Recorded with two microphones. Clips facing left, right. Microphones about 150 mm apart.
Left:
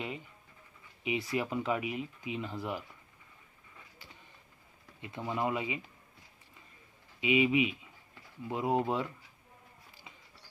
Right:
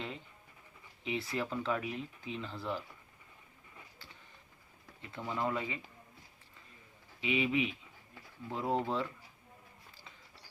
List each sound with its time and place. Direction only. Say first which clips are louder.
1.0 s speech: left 3 dB; 10° left (ahead or behind)
4.9 s speech: left 3 dB; 15° left (ahead or behind)
7.2 s speech: left 5 dB; 15° left (ahead or behind)